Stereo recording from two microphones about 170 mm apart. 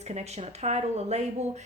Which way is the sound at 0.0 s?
40° right (ahead or behind).